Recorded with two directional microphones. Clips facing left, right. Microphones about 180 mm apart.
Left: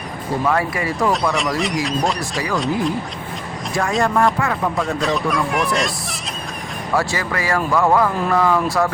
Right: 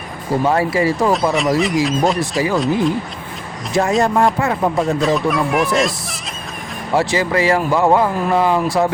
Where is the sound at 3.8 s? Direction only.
25° right (ahead or behind).